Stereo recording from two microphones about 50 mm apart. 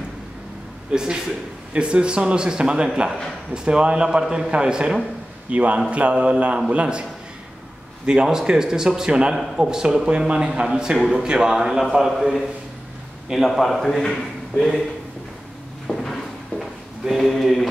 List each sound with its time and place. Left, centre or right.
0.9 s a man's voice: centre
8.1 s speech: centre
13.5 s a man's voice: centre
15.9 s a sound: centre